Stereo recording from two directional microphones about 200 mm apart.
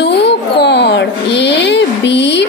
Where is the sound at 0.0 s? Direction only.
60° left (ahead or behind).